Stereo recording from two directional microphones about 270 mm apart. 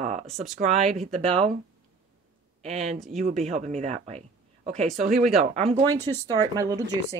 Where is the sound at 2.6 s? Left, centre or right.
Right.